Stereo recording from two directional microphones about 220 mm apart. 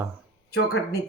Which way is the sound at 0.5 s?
45° left (ahead or behind).